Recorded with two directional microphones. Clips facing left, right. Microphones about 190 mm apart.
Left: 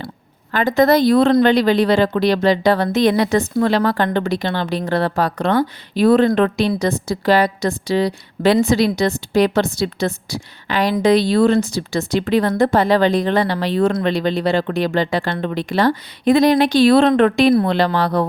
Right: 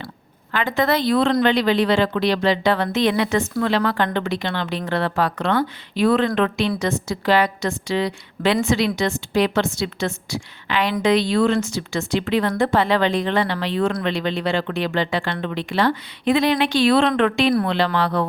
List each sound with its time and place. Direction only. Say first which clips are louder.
0.5 s speech: left 6 dB; 40° left (ahead or behind)